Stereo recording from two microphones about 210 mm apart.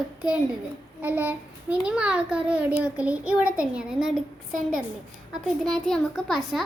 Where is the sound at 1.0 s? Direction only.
10° right (ahead or behind).